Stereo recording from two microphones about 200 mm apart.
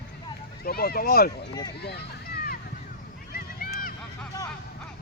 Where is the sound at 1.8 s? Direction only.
55° left (ahead or behind).